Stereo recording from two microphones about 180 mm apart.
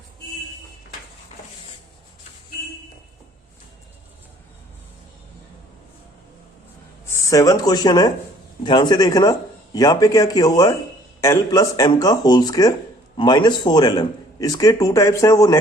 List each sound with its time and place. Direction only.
7.1 s a man's voice: 20° left (ahead or behind)